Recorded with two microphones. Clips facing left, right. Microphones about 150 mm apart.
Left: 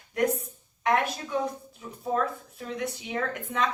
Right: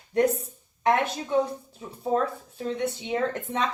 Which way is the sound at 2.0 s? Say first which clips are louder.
Right 3 dB; 30° right (ahead or behind).